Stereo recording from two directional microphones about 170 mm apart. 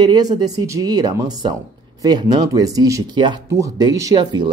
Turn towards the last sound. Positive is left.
turn(degrees=-25)  # may be behind; listen again after turning